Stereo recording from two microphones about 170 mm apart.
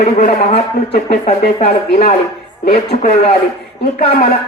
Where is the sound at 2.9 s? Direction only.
45° left (ahead or behind).